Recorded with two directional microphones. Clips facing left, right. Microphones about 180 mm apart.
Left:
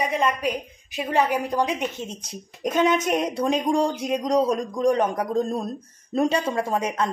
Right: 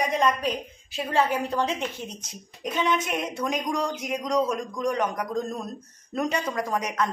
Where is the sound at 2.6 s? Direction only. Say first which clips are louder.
Left 5 dB; 45° left (ahead or behind).